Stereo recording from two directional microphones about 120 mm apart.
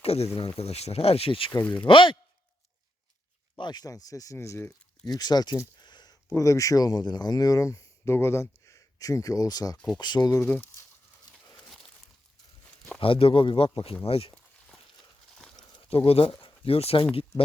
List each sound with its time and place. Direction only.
0.0 s a sound: 55° left (ahead or behind)
0.3 s speech: 55° left (ahead or behind)
1.6 s speech: 10° left (ahead or behind)
1.9 s speech: 45° left (ahead or behind)
3.6 s speech: 35° left (ahead or behind)
5.0 s speech: 35° left (ahead or behind)
5.8 s a sound: 35° left (ahead or behind)
6.3 s speech: 25° left (ahead or behind)
9.7 s speech: 10° left (ahead or behind)
10.0 s speech: 35° left (ahead or behind)
10.4 s speech: 15° left (ahead or behind)
13.0 s speech: 50° left (ahead or behind)
15.9 s speech: 50° left (ahead or behind)